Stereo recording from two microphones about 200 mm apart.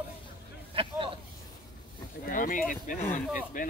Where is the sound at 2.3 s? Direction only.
45° left (ahead or behind).